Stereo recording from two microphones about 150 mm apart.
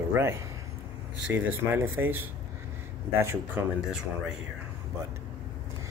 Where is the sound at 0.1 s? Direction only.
15° right (ahead or behind).